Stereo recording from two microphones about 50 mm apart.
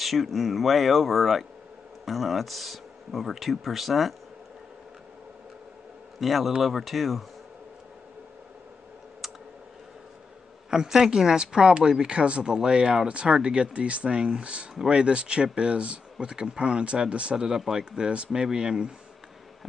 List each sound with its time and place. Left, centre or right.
0.0 s speech: centre
6.1 s a man's voice: centre
10.7 s speech: centre
17.5 s speech: centre